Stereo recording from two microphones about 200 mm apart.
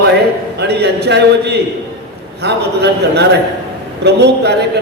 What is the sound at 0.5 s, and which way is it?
A man's voice, 55° right (ahead or behind).